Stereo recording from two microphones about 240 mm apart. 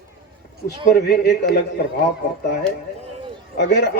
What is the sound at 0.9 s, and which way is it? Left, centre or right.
Speech, left.